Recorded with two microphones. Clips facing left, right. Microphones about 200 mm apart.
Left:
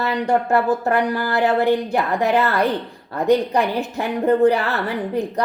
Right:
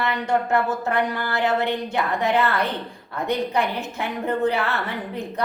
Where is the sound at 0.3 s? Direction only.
35° left (ahead or behind).